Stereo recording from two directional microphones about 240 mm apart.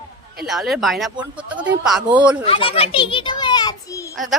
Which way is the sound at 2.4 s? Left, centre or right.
Left.